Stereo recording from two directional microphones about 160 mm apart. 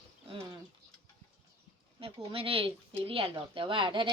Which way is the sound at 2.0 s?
35° right (ahead or behind).